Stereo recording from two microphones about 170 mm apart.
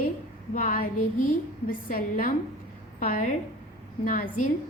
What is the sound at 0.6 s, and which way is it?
A woman's voice, 55° left (ahead or behind).